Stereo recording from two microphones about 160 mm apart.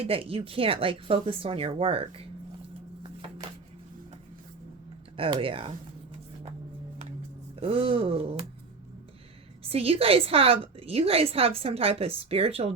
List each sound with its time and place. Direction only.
0.0 s a woman's voice: 35° right (ahead or behind)
3.0 s a sound: 30° right (ahead or behind)
5.1 s a woman's voice: 35° right (ahead or behind)
7.5 s a woman's voice: 35° right (ahead or behind)
9.6 s a woman's voice: 35° right (ahead or behind)